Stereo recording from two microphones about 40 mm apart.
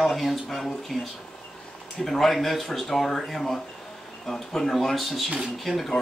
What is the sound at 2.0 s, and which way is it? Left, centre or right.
Speech, centre.